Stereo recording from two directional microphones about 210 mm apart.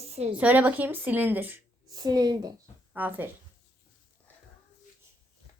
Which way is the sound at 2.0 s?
20° right (ahead or behind).